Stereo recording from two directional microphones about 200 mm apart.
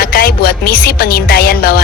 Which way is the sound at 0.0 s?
50° left (ahead or behind).